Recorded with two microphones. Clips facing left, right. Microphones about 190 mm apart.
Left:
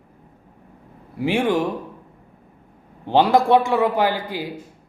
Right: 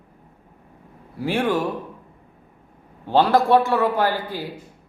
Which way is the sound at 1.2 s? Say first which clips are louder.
Left 2 dB; 15° left (ahead or behind).